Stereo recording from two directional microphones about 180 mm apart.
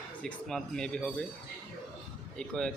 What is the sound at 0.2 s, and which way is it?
Speech, 5° left (ahead or behind).